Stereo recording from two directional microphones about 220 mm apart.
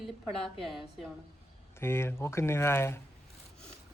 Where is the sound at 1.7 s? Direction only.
10° left (ahead or behind).